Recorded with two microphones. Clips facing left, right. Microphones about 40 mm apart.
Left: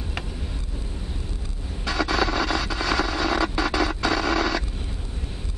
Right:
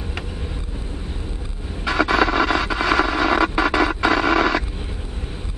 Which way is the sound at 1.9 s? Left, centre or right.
Right.